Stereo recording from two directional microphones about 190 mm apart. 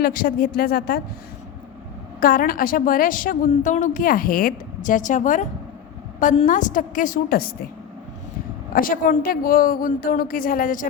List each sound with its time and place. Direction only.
0.0 s a woman's voice: 50° left (ahead or behind)
2.2 s a woman's voice: 45° left (ahead or behind)
8.7 s a woman's voice: 45° left (ahead or behind)